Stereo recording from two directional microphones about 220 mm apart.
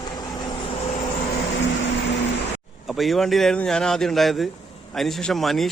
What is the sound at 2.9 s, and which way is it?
Speech, centre (ahead or behind).